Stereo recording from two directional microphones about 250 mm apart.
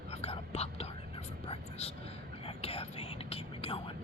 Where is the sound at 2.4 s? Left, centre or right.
Left.